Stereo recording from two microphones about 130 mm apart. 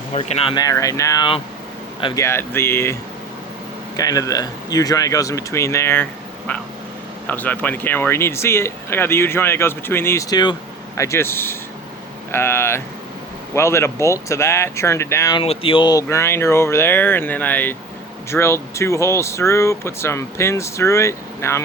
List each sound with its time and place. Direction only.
0.1 s speech: 50° left (ahead or behind)
0.5 s speech: 25° left (ahead or behind)
15.4 s speech: 45° left (ahead or behind)
16.0 s speech: 20° left (ahead or behind)